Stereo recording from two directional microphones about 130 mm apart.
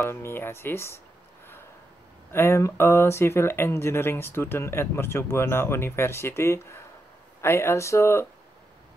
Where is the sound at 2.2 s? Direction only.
20° left (ahead or behind).